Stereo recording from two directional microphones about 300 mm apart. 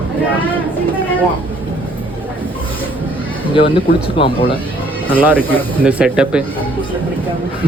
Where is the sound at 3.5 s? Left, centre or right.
Centre.